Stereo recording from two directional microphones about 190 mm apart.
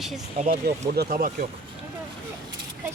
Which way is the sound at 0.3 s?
45° right (ahead or behind).